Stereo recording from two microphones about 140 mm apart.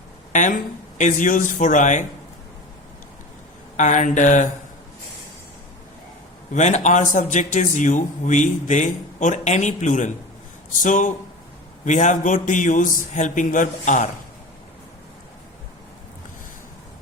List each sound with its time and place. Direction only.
0.3 s a man's voice: 60° left (ahead or behind)
3.8 s a man's voice: 60° left (ahead or behind)
6.5 s a man's voice: 55° left (ahead or behind)